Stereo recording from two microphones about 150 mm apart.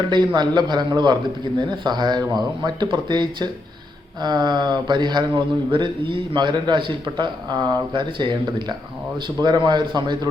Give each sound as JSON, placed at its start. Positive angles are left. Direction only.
{"t": 0.3, "sound": "speech", "side_deg": -30}